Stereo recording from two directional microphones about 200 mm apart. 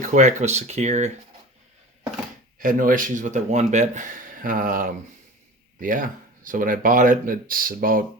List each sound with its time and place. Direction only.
0.0 s speech: 35° right (ahead or behind)
2.6 s speech: 45° right (ahead or behind)